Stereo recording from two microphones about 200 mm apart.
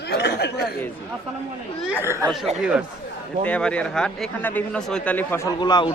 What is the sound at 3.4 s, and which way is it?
A man's voice, 5° left (ahead or behind).